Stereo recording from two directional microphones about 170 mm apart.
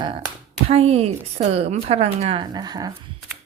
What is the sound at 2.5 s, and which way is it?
Speech, 25° right (ahead or behind).